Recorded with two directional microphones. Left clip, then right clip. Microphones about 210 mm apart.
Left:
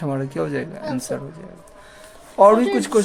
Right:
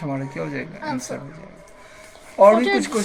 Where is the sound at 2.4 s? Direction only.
50° left (ahead or behind).